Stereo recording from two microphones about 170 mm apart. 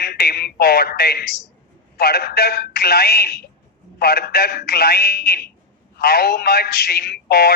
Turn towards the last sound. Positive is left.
turn(degrees=65)  # may be behind; listen again after turning